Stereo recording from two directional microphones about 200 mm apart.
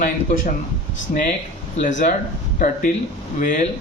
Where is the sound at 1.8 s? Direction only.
40° left (ahead or behind).